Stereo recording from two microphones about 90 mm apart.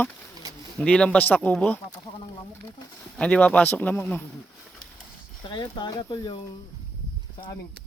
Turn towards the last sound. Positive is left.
turn(degrees=50)  # may be behind; listen again after turning